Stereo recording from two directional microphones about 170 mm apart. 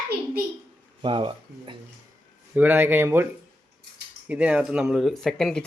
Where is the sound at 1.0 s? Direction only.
30° right (ahead or behind).